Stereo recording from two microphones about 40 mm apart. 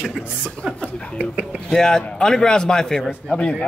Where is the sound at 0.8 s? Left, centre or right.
Left.